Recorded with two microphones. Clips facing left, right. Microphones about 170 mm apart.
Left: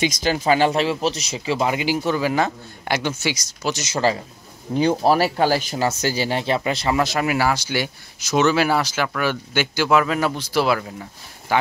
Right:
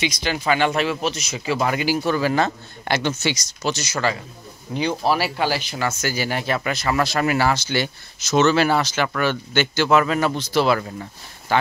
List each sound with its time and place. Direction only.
0.0 s speech: 45° left (ahead or behind)
1.5 s speech: 20° left (ahead or behind)
3.8 s speech: 30° left (ahead or behind)
4.7 s speech: 45° left (ahead or behind)
5.8 s speech: 30° left (ahead or behind)
7.2 s speech: 10° left (ahead or behind)